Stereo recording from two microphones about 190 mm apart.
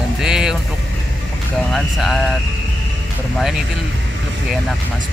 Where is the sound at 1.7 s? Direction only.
Centre (ahead or behind).